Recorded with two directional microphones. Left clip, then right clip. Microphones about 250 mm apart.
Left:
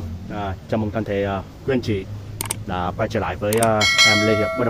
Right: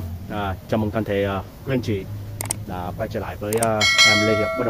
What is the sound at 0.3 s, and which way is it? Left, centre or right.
Speech, centre.